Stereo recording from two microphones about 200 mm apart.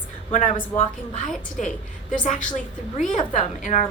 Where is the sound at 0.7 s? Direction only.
10° left (ahead or behind).